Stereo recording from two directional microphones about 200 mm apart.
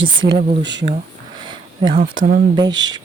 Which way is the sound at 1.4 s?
20° right (ahead or behind).